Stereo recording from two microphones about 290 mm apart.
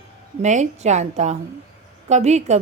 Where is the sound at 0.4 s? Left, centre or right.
Right.